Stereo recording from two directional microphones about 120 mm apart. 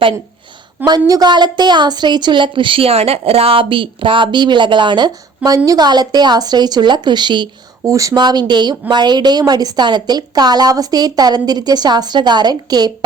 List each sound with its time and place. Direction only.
0.9 s a woman's voice: 35° right (ahead or behind)
7.9 s a woman's voice: 25° right (ahead or behind)